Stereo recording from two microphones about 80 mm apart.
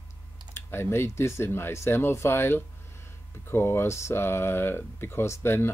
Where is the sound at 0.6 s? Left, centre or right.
Left.